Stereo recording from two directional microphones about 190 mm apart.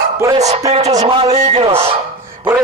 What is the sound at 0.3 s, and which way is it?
Speech, 35° right (ahead or behind).